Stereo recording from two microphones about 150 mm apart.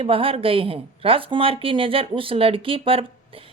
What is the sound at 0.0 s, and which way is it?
Speech, 40° right (ahead or behind).